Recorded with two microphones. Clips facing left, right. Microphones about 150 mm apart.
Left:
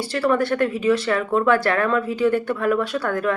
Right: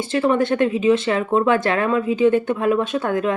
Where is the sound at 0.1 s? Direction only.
20° right (ahead or behind).